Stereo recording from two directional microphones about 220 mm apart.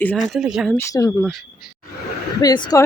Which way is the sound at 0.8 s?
15° left (ahead or behind).